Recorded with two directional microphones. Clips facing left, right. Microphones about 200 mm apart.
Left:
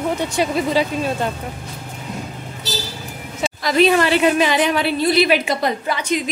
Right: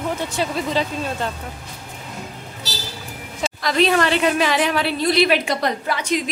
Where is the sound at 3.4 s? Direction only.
5° left (ahead or behind).